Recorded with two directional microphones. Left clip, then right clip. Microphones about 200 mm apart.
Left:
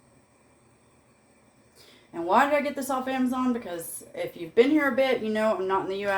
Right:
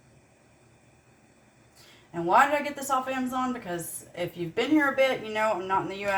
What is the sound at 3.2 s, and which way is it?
A woman's voice, 25° left (ahead or behind).